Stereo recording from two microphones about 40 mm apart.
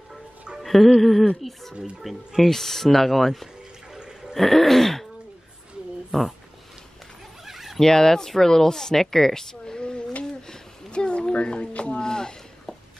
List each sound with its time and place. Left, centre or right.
0.6 s music: centre
1.4 s speech: centre
3.9 s a sound: centre
4.4 s speech: centre
6.1 s speech: centre
7.4 s cat: centre
7.8 s speech: centre
10.9 s a sound: left
12.0 s a sound: centre